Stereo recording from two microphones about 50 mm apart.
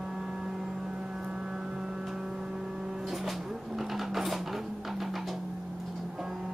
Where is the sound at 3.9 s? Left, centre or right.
Centre.